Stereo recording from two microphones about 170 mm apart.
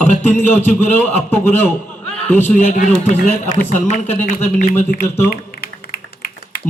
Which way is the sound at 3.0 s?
40° left (ahead or behind).